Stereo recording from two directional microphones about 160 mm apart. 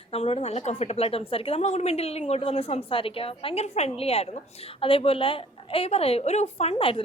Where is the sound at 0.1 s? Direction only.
40° left (ahead or behind).